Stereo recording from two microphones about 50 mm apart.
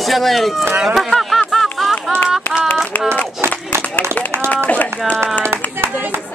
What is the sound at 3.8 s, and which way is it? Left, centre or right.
Run, left.